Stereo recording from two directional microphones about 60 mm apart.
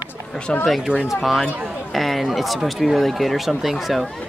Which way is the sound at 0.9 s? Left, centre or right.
Centre.